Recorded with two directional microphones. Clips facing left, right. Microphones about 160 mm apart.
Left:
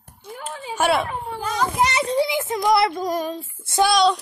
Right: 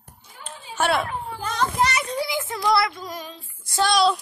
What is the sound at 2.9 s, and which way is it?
Female singing, 45° left (ahead or behind).